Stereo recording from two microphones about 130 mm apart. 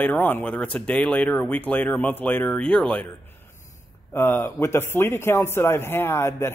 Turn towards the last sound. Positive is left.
turn(degrees=20)  # may be behind; listen again after turning